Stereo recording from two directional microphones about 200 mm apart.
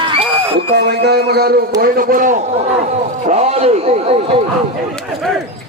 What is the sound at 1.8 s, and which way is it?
A man's voice, 45° right (ahead or behind).